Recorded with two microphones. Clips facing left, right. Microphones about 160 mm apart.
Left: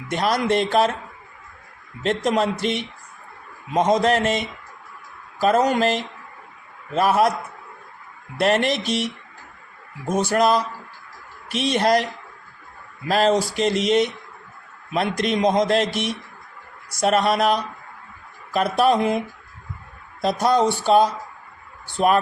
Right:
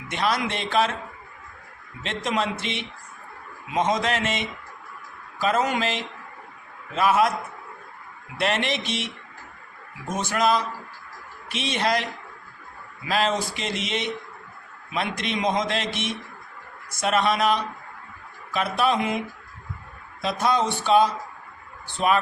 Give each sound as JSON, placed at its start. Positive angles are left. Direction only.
{"t": 0.1, "sound": "a man's voice", "side_deg": 40}
{"t": 2.0, "sound": "a man's voice", "side_deg": 40}
{"t": 8.4, "sound": "a man's voice", "side_deg": 40}
{"t": 10.1, "sound": "a man's voice", "side_deg": 40}
{"t": 13.1, "sound": "a man's voice", "side_deg": 45}
{"t": 20.2, "sound": "a man's voice", "side_deg": 40}